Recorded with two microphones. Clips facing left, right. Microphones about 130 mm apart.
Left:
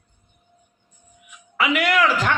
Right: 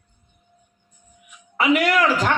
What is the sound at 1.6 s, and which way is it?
Speech, 40° right (ahead or behind).